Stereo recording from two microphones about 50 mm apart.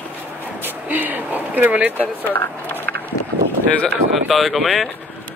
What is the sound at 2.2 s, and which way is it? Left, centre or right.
Speech, left.